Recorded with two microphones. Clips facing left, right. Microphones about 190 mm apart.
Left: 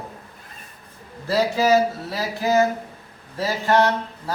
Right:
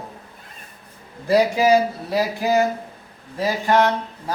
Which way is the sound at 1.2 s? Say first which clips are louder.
Right 3 dB; 15° right (ahead or behind).